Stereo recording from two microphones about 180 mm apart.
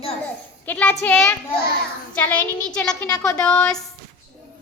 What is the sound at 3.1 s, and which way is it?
Speech, 20° left (ahead or behind).